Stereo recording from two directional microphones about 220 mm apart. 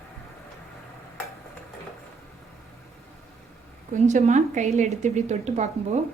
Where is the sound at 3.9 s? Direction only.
30° right (ahead or behind).